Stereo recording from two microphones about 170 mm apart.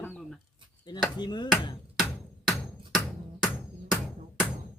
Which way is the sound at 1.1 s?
25° left (ahead or behind).